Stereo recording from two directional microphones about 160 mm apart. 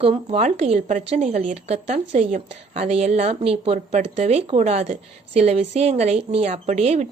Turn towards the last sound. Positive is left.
turn(degrees=-45)  # may be behind; listen again after turning